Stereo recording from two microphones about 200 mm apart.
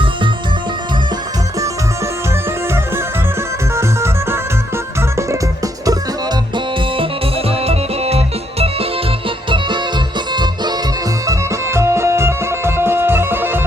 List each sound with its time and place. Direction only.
3.8 s music: 15° right (ahead or behind)
6.9 s music: 30° right (ahead or behind); by 13.6 s 10° right (ahead or behind)